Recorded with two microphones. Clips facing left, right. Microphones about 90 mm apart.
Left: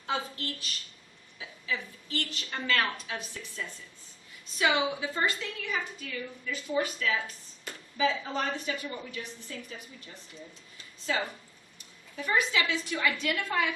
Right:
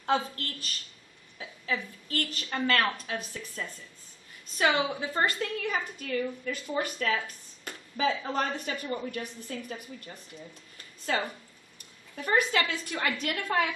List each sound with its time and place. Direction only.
0.0 s a woman's voice: 45° right (ahead or behind)
11.1 s a woman's voice: 50° right (ahead or behind)